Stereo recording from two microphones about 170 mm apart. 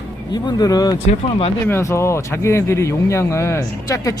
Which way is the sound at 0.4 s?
20° left (ahead or behind).